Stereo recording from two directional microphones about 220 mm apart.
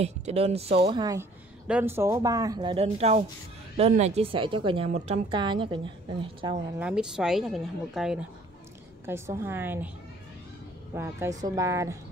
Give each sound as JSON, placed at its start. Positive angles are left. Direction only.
{"t": 0.0, "sound": "a woman's voice", "side_deg": -30}
{"t": 6.8, "sound": "a woman's voice", "side_deg": -5}
{"t": 11.0, "sound": "speech", "side_deg": -15}